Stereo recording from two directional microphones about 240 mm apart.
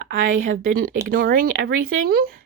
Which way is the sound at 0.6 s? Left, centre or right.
Right.